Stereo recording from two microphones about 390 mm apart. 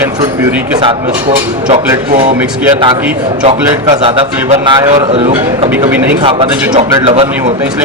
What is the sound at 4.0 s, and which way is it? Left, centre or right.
A man's voice, centre.